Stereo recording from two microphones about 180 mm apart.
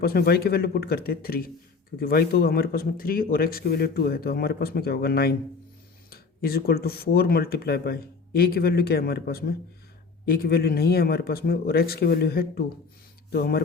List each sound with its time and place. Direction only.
0.0 s speech: 60° left (ahead or behind)